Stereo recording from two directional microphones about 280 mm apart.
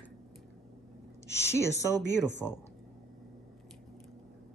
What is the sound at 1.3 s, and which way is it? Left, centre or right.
Speech, centre.